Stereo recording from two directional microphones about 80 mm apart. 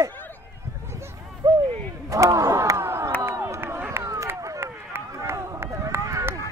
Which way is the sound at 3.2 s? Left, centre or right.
Right.